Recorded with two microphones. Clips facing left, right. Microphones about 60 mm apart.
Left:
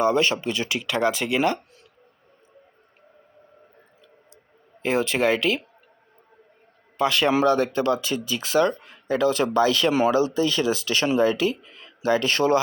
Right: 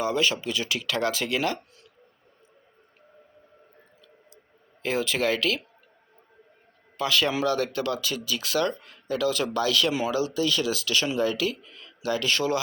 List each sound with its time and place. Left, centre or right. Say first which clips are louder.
0.0 s speech: left 5 dB; left
4.8 s speech: left 4 dB; left
6.9 s speech: left 5 dB; left